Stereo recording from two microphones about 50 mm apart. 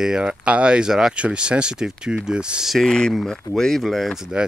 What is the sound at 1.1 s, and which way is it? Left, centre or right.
Speech, right.